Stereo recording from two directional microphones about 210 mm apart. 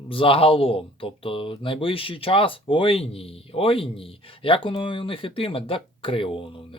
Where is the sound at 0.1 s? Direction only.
25° left (ahead or behind).